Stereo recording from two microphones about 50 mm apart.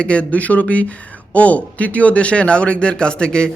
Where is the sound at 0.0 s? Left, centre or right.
Left.